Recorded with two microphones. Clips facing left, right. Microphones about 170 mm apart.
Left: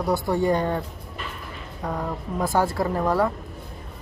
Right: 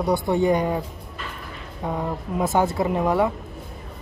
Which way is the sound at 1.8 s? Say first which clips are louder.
Right 2 dB; centre (ahead or behind).